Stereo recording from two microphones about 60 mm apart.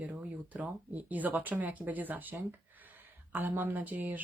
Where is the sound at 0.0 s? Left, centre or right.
Right.